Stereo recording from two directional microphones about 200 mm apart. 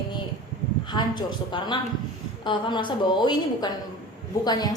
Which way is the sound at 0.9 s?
20° left (ahead or behind).